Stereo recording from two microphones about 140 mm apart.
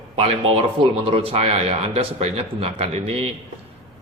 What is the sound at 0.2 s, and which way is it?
A man's voice, 45° right (ahead or behind).